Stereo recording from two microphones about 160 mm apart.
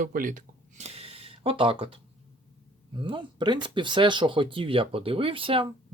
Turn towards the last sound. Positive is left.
turn(degrees=-35)  # may be behind; listen again after turning